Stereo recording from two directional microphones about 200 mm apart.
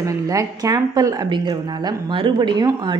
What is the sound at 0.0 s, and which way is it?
A woman's voice, 15° right (ahead or behind).